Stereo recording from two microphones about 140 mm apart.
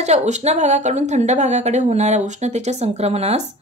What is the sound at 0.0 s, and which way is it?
Speech, 55° right (ahead or behind).